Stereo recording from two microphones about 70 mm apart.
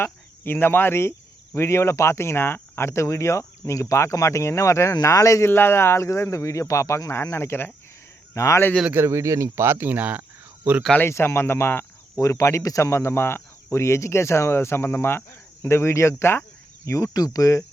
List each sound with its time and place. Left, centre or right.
0.0 s speech: left
5.5 s speech: left
9.0 s speech: right
11.0 s speech: left
12.1 s speech: left
17.2 s speech: left